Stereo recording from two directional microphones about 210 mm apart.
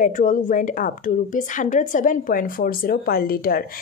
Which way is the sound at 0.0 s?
40° left (ahead or behind).